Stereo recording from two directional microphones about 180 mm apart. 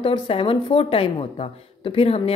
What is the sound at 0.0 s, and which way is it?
A woman's voice, 30° left (ahead or behind).